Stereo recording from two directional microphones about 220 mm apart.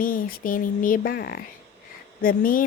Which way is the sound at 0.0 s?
40° left (ahead or behind).